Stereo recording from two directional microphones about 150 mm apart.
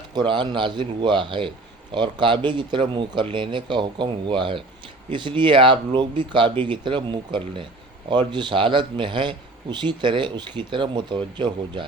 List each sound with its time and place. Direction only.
0.1 s a man's voice: 30° right (ahead or behind)